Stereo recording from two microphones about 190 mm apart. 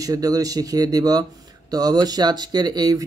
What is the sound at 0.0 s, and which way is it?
Speech, 20° right (ahead or behind).